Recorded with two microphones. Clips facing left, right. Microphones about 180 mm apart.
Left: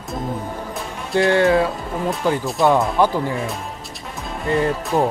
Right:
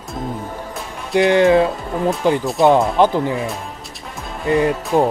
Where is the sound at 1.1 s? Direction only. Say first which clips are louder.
Right 3 dB; 20° right (ahead or behind).